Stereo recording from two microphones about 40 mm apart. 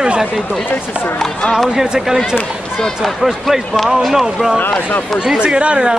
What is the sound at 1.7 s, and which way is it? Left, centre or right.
A man's voice, centre.